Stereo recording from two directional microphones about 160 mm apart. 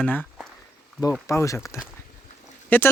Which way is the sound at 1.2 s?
20° left (ahead or behind).